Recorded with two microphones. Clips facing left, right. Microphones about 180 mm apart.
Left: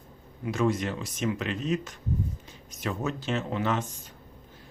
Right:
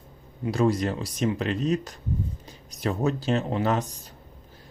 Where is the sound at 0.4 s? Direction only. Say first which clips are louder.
Right 3 dB; 35° right (ahead or behind).